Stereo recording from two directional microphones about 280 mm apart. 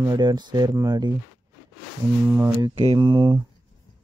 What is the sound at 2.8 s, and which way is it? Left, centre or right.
Speech, centre.